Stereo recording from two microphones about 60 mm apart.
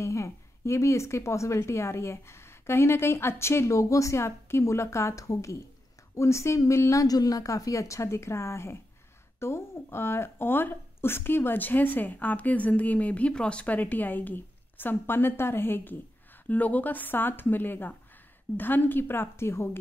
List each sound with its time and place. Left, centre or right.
0.0 s a woman's voice: left